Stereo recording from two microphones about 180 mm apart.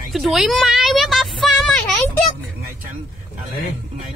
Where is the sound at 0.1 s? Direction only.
Centre (ahead or behind).